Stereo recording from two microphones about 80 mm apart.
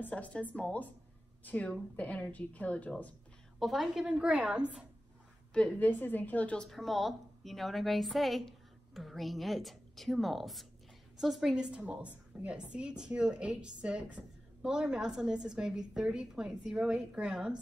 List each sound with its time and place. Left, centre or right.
0.0 s a woman's voice: centre
3.5 s a woman's voice: centre
5.5 s a woman's voice: centre